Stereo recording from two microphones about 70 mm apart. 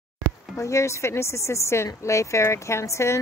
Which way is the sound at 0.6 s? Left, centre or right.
Left.